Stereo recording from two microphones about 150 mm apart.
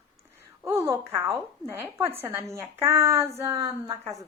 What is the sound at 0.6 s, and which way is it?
A woman's voice, 20° right (ahead or behind).